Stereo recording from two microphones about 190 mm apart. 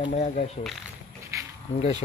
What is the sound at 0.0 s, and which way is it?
Speech, 35° left (ahead or behind).